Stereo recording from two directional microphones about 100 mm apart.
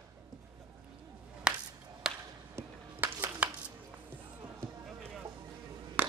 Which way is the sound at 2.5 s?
20° right (ahead or behind).